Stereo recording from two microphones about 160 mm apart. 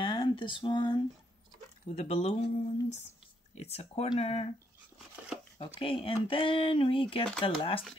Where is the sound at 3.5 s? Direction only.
45° left (ahead or behind).